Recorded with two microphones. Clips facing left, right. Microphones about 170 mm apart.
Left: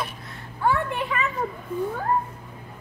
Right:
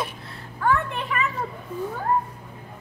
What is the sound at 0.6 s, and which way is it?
Speech, 25° left (ahead or behind).